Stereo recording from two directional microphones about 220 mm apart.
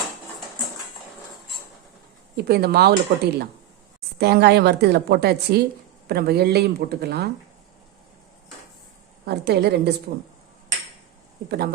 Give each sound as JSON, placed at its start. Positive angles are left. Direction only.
{"t": 2.3, "sound": "a woman's voice", "side_deg": -45}
{"t": 9.2, "sound": "a woman's voice", "side_deg": -50}